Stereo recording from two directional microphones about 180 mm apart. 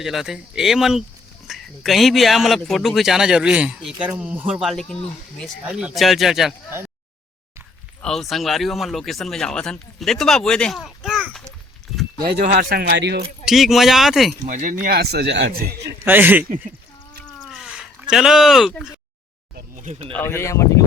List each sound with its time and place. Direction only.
0.0 s a man's voice: centre (ahead or behind)
8.0 s a man's voice: centre (ahead or behind)
12.4 s speech: 55° right (ahead or behind); by 13.2 s 70° right (ahead or behind)
13.4 s a man's voice: centre (ahead or behind)
14.4 s speech: 45° right (ahead or behind); by 15.5 s 80° right
15.5 s speech: 55° right (ahead or behind)
16.0 s speech: 10° right (ahead or behind)
17.5 s a sound: 5° right (ahead or behind)
19.5 s a sound: 45° right (ahead or behind)
20.1 s speech: 10° left (ahead or behind)